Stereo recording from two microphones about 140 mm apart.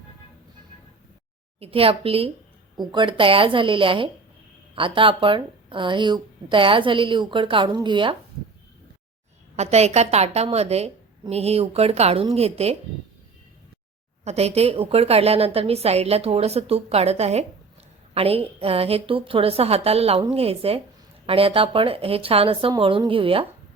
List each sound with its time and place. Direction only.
1.5 s a woman's voice: 45° right (ahead or behind)
9.6 s a woman's voice: 50° right (ahead or behind)
14.3 s a woman's voice: 50° right (ahead or behind)